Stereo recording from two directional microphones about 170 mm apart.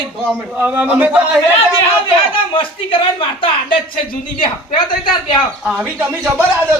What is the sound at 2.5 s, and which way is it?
Speech, 30° left (ahead or behind).